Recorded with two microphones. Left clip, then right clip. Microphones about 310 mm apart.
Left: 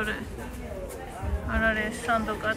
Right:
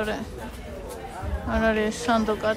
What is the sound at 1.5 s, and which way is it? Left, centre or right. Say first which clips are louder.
A woman's voice: right 3 dB; centre.